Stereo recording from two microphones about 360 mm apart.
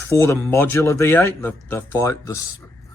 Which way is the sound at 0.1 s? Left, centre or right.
Centre.